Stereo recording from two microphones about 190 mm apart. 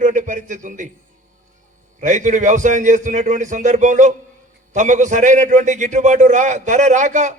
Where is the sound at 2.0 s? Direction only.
40° right (ahead or behind).